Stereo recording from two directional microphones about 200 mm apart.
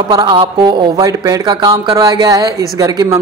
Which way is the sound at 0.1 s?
25° right (ahead or behind).